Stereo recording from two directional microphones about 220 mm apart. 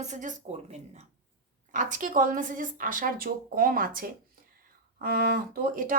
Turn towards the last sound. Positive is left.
turn(degrees=-40)  # may be behind; listen again after turning